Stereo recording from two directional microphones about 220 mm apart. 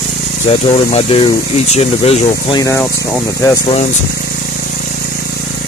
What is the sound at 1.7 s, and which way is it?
Speech, 25° left (ahead or behind).